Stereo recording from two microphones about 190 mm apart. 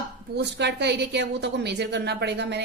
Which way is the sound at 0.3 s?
60° right (ahead or behind).